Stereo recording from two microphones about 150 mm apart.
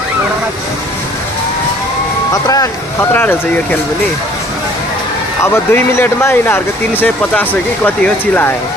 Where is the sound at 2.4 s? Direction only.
25° left (ahead or behind).